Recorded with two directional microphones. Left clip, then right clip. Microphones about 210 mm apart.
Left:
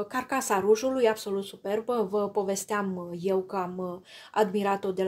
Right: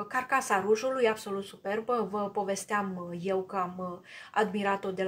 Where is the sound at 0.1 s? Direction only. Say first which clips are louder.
Right 2 dB; 40° left (ahead or behind).